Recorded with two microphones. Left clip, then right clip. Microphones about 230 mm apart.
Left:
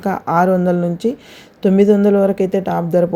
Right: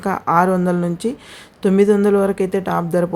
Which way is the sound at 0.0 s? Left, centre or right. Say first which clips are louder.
Even; centre.